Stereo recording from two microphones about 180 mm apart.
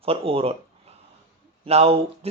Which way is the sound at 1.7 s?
35° right (ahead or behind).